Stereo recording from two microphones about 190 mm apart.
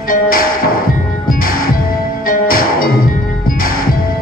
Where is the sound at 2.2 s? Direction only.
50° left (ahead or behind).